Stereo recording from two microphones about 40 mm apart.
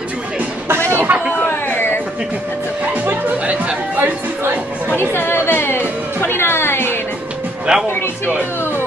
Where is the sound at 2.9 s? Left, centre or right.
Right.